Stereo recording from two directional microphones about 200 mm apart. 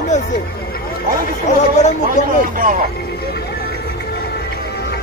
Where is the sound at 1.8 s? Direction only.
35° left (ahead or behind).